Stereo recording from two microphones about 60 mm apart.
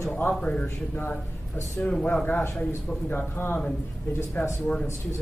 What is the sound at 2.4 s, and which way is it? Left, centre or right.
Speech, left.